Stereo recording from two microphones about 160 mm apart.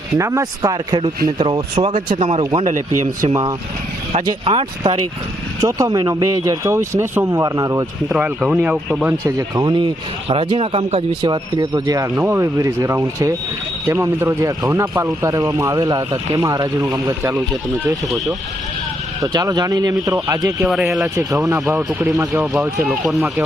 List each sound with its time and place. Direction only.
0.2 s speech: 20° right (ahead or behind); by 2.4 s 35° right (ahead or behind)
2.4 s speech: 25° right (ahead or behind)
2.6 s speech: 55° right (ahead or behind)
4.1 s speech: 35° right (ahead or behind)
8.1 s speech: 5° right (ahead or behind)
9.2 s speech: 25° right (ahead or behind)
19.2 s speech: 25° right (ahead or behind)
22.4 s speech: 10° right (ahead or behind)